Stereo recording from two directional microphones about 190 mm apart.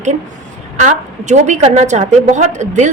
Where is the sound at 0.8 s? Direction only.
40° right (ahead or behind).